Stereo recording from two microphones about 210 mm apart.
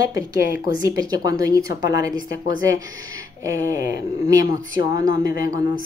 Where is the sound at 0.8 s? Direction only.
15° right (ahead or behind).